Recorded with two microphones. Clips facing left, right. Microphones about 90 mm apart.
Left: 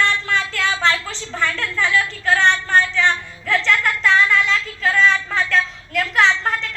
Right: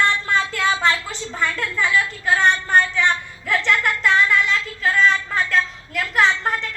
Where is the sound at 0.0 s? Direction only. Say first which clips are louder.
Even; 20° right (ahead or behind).